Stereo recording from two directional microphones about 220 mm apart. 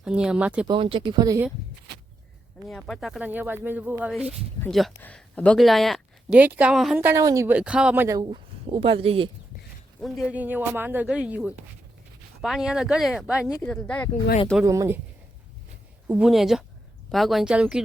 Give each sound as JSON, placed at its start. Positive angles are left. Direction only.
{"t": 0.0, "sound": "speech", "side_deg": -5}
{"t": 0.7, "sound": "speech", "side_deg": -25}
{"t": 2.6, "sound": "speech", "side_deg": 5}
{"t": 10.0, "sound": "speech", "side_deg": 0}
{"t": 13.5, "sound": "speech", "side_deg": 5}
{"t": 14.6, "sound": "speech", "side_deg": -15}
{"t": 16.0, "sound": "speech", "side_deg": -5}